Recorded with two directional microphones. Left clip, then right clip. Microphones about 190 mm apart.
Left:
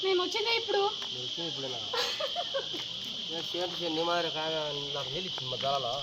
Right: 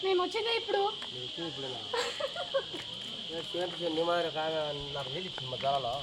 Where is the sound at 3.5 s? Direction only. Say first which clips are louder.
Right 1 dB; 55° left (ahead or behind).